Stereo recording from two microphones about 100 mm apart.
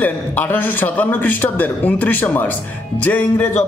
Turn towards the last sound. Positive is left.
turn(degrees=15)  # may be behind; listen again after turning